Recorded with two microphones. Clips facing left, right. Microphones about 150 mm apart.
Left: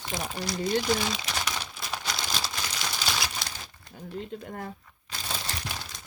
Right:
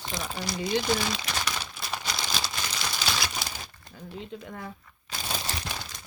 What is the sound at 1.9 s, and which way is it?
Crumpling, centre (ahead or behind).